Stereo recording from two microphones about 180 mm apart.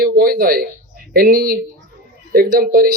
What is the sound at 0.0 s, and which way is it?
A man's voice, 55° right (ahead or behind).